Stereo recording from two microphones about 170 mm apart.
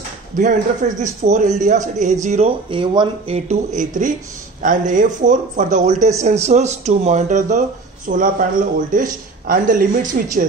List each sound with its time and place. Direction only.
0.4 s speech: 45° right (ahead or behind); by 3.3 s 30° right (ahead or behind)
3.3 s speech: 45° right (ahead or behind)